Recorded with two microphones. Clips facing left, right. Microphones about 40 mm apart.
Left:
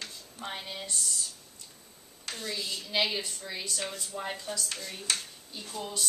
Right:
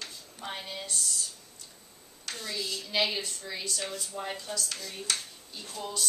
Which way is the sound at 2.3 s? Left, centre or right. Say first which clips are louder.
Even; centre.